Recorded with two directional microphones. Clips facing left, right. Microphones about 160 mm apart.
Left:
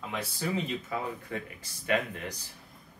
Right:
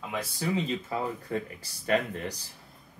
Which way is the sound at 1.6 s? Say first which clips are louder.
Right 1 dB; 35° right (ahead or behind).